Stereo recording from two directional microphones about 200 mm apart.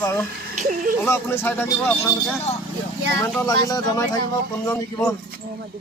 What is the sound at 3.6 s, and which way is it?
Speech, 20° left (ahead or behind).